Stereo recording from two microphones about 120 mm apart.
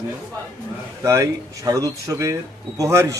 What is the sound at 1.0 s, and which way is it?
Speech, 25° right (ahead or behind).